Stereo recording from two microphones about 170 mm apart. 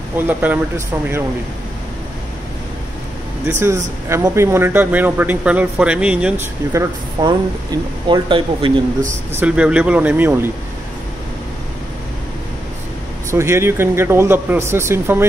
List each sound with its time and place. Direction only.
0.3 s a man's voice: 10° right (ahead or behind)
3.4 s a man's voice: 15° right (ahead or behind)
6.7 s speech: 20° right (ahead or behind)
9.3 s a man's voice: 10° right (ahead or behind)
13.3 s a man's voice: 15° right (ahead or behind)